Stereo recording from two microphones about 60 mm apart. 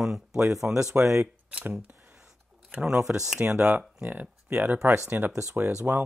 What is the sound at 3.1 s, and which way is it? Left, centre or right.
Speech, centre.